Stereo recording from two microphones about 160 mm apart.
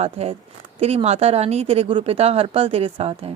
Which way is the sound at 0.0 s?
40° right (ahead or behind).